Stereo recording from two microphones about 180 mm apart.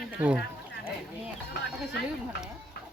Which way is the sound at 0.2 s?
5° right (ahead or behind).